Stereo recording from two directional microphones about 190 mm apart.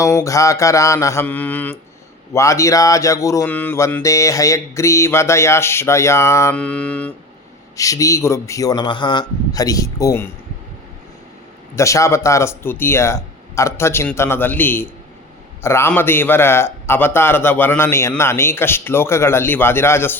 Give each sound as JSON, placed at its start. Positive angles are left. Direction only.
{"t": 0.0, "sound": "speech", "side_deg": 15}
{"t": 7.8, "sound": "speech", "side_deg": 15}
{"t": 11.8, "sound": "speech", "side_deg": 15}